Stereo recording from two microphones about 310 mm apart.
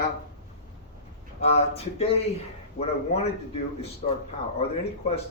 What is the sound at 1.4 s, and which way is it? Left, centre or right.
Speech, centre.